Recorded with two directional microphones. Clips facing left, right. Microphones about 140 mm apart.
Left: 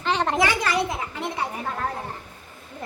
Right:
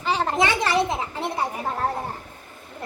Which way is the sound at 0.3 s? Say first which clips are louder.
Right 1 dB; 25° right (ahead or behind).